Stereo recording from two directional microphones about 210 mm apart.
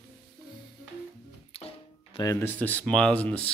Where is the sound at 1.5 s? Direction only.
25° left (ahead or behind).